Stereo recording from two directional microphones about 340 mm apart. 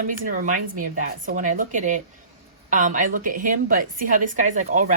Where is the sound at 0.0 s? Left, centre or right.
Right.